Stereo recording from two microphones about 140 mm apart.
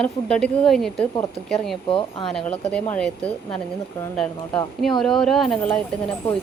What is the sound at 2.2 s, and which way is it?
A woman's voice, 5° left (ahead or behind).